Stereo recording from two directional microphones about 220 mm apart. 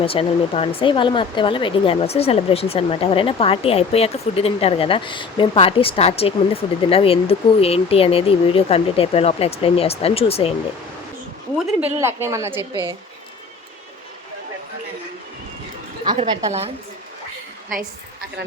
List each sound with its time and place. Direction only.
0.0 s speech: 25° left (ahead or behind)
11.8 s a woman's voice: 10° right (ahead or behind)
16.0 s a woman's voice: 25° right (ahead or behind)